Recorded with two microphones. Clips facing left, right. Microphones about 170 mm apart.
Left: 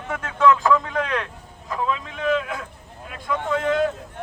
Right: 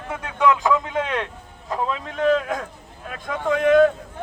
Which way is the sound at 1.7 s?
40° right (ahead or behind).